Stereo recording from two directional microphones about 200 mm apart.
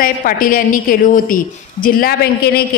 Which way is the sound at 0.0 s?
45° left (ahead or behind).